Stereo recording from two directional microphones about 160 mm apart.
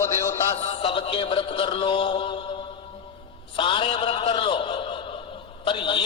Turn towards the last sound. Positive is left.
turn(degrees=30)  # may be behind; listen again after turning